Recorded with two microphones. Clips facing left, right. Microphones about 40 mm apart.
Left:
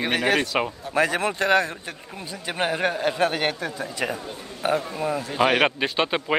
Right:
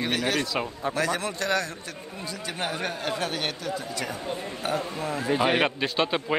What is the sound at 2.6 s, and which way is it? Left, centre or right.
A man's voice, left.